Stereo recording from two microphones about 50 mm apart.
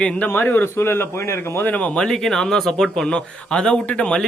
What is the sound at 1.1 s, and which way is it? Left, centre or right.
Speech, left.